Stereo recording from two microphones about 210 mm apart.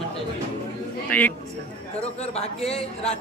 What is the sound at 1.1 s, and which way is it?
Speech, 10° left (ahead or behind).